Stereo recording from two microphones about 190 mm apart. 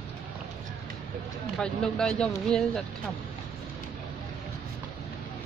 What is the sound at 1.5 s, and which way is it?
Speech, 5° left (ahead or behind).